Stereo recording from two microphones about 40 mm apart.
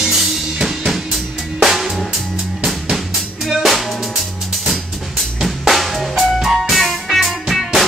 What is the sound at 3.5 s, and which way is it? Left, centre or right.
Music, centre.